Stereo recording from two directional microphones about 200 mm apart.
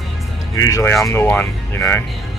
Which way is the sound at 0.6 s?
15° left (ahead or behind).